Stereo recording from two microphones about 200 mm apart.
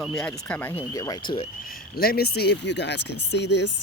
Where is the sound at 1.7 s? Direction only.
50° left (ahead or behind).